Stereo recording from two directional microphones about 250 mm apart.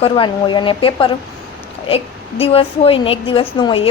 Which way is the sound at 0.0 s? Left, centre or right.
Centre.